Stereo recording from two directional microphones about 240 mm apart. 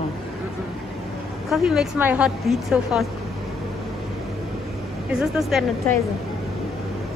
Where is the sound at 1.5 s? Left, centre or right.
Centre.